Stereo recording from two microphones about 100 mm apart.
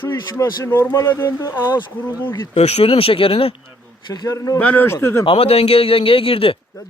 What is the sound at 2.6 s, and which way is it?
Speech, 90° left.